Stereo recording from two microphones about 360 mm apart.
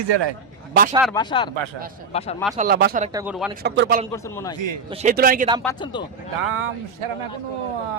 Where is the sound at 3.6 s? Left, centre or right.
Right.